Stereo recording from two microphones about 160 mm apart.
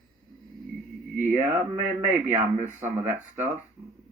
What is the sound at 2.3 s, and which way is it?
Speech, 50° right (ahead or behind).